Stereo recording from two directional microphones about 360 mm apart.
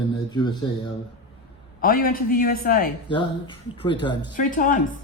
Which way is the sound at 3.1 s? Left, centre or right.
Centre.